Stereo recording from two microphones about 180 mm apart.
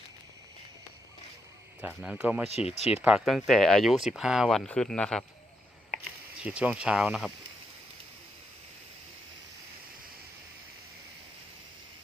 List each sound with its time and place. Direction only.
1.8 s speech: 5° right (ahead or behind)
2.6 s speech: 35° left (ahead or behind)
3.0 s speech: 5° right (ahead or behind)
6.1 s speech: 5° right (ahead or behind)